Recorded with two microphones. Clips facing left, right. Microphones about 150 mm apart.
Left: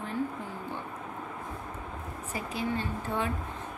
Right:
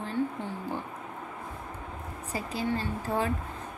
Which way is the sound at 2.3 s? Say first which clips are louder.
Right 2 dB; 30° right (ahead or behind).